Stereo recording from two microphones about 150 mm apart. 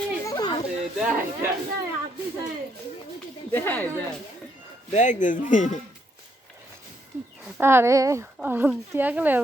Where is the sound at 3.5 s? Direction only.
10° left (ahead or behind).